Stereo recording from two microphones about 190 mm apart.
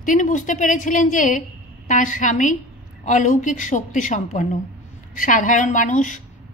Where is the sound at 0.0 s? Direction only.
45° left (ahead or behind).